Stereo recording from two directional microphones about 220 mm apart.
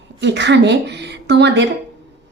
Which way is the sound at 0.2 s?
50° right (ahead or behind).